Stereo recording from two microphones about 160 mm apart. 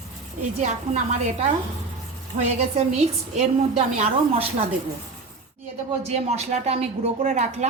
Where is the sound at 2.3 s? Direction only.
60° right (ahead or behind).